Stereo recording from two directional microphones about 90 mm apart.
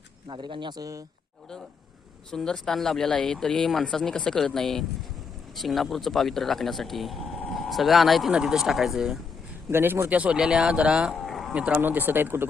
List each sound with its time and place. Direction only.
0.3 s speech: 65° right (ahead or behind)
0.8 s speech: 40° right (ahead or behind)
2.3 s speech: 5° left (ahead or behind)
9.6 s speech: 25° right (ahead or behind)
11.3 s a sound: centre (ahead or behind)
11.5 s speech: 15° right (ahead or behind)